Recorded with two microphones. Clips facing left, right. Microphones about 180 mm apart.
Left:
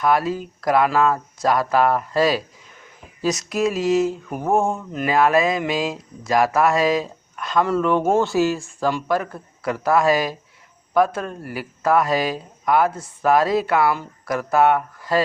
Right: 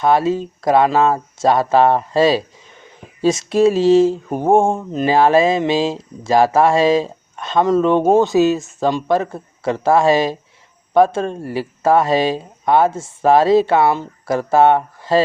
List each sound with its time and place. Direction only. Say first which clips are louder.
0.0 s speech: right 4 dB; 25° right (ahead or behind)